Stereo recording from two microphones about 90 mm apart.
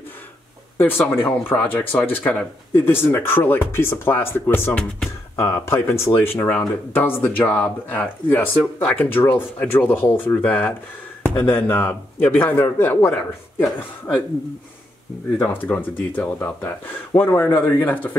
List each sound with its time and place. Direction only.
0.7 s speech: 25° left (ahead or behind)
15.3 s speech: 20° left (ahead or behind)